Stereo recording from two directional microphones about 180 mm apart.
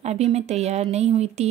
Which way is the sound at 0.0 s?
35° right (ahead or behind).